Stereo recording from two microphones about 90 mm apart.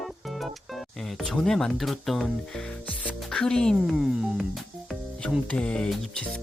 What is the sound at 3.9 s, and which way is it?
Music, 5° right (ahead or behind).